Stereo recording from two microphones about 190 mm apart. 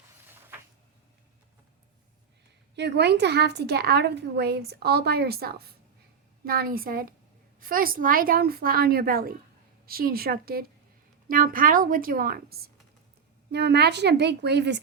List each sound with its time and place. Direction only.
2.7 s a woman's voice: 60° right (ahead or behind)